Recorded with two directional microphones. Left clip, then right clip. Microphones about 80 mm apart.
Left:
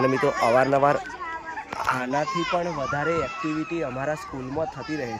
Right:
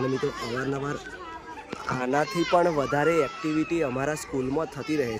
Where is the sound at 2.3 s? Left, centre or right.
Left.